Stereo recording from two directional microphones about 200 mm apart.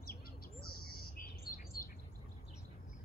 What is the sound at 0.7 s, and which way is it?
Bird, 50° left (ahead or behind).